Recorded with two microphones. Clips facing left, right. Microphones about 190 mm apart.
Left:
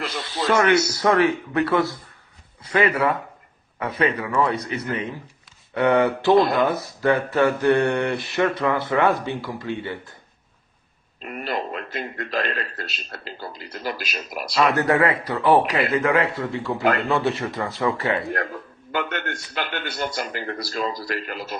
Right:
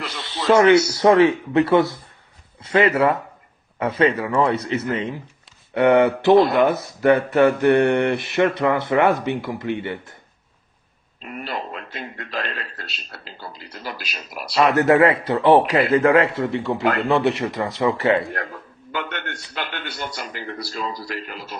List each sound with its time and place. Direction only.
0.4 s speech: 25° right (ahead or behind)
11.2 s a man's voice: 45° left (ahead or behind)
14.5 s speech: 25° right (ahead or behind)
18.9 s a man's voice: 45° left (ahead or behind)